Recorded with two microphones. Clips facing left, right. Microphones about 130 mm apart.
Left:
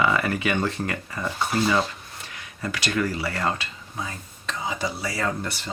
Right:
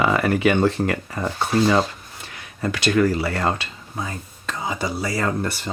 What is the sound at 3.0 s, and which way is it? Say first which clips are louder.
Speech: right 6 dB; 55° right (ahead or behind).